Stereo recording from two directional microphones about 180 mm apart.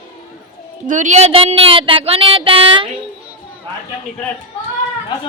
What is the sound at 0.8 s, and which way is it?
Speech, 45° right (ahead or behind).